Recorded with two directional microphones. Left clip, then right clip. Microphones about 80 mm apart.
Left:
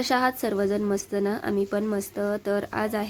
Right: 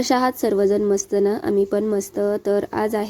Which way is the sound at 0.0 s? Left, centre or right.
Right.